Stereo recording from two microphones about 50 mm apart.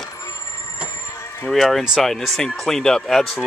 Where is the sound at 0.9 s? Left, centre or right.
Left.